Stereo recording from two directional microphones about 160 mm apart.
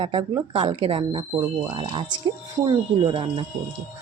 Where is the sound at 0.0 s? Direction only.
30° right (ahead or behind).